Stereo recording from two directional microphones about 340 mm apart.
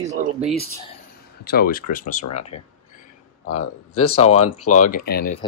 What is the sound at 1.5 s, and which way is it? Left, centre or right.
Speech, left.